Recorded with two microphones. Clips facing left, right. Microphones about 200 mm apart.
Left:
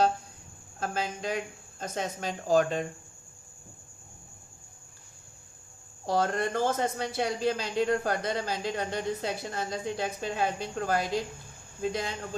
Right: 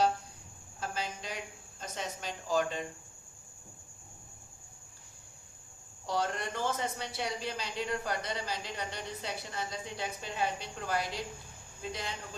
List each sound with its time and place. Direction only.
0.8 s speech: 50° left (ahead or behind)
6.1 s speech: 45° left (ahead or behind)